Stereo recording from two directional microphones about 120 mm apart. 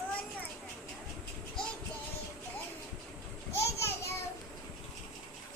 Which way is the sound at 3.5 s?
20° left (ahead or behind).